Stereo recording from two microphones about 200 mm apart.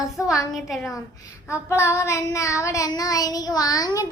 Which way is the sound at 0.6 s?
Centre (ahead or behind).